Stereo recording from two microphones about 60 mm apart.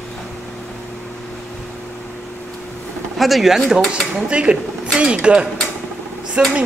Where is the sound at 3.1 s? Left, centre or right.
Centre.